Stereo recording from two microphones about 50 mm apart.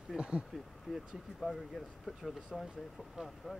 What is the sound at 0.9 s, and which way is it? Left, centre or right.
Speech, centre.